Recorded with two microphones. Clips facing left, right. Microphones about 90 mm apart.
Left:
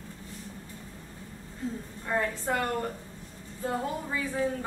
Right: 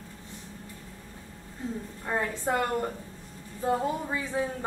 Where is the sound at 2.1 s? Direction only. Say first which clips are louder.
Even; 20° right (ahead or behind).